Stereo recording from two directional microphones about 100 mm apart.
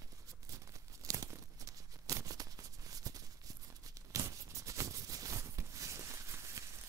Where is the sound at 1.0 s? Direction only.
35° right (ahead or behind).